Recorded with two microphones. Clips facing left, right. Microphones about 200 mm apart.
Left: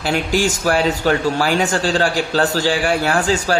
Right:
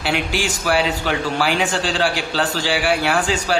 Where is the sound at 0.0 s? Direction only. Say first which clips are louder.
Left 4 dB; 40° left (ahead or behind).